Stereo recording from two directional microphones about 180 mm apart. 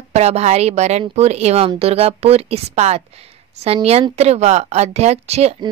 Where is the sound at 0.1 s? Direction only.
35° right (ahead or behind).